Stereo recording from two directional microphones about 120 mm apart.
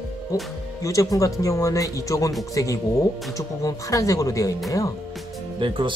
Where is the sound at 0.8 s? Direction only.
25° left (ahead or behind).